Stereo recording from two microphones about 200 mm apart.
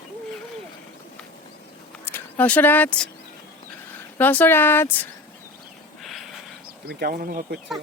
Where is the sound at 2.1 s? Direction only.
10° left (ahead or behind).